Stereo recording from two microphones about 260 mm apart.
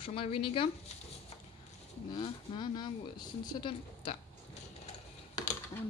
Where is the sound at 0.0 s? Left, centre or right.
Left.